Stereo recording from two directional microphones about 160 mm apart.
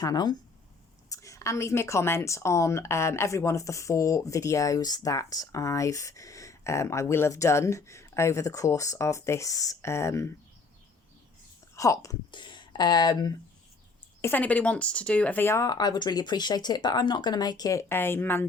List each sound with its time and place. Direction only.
0.0 s speech: 25° left (ahead or behind)
11.7 s speech: 20° left (ahead or behind)
14.2 s speech: 15° left (ahead or behind)